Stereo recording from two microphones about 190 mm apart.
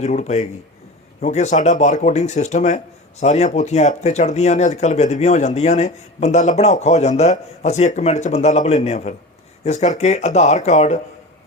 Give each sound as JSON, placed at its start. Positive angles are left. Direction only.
{"t": 0.0, "sound": "speech", "side_deg": 40}